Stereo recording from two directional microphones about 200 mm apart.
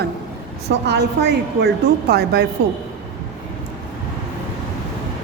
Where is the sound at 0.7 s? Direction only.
60° right (ahead or behind).